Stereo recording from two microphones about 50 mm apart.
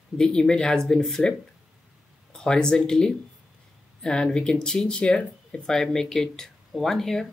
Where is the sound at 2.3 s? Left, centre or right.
Centre.